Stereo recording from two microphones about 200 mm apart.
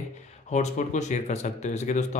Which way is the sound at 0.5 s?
35° left (ahead or behind).